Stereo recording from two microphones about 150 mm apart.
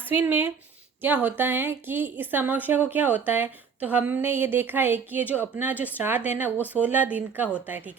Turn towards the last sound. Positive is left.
turn(degrees=-10)  # may be behind; listen again after turning